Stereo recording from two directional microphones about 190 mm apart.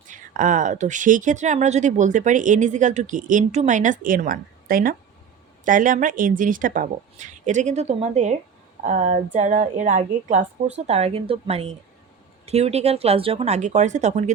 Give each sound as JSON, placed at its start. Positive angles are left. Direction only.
{"t": 0.1, "sound": "speech", "side_deg": -40}